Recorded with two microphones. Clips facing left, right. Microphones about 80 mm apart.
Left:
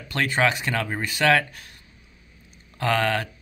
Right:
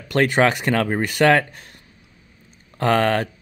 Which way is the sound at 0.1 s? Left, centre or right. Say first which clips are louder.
Right 5 dB; right.